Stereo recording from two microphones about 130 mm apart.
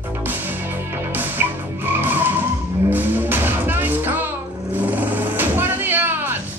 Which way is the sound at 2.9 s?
15° right (ahead or behind).